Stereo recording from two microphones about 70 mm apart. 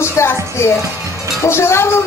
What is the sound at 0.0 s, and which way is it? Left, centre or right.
Music, left.